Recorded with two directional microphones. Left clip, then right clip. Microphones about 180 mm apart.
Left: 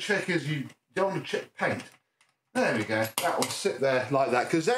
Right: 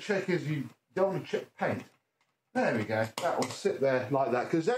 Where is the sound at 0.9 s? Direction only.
Centre (ahead or behind).